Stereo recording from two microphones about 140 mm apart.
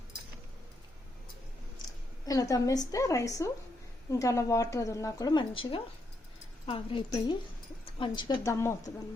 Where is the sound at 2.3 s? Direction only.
25° left (ahead or behind).